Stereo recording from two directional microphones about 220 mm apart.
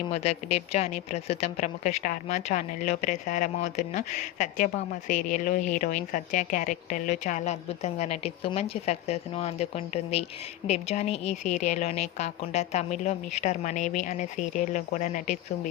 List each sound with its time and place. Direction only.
0.1 s a woman's voice: 30° left (ahead or behind)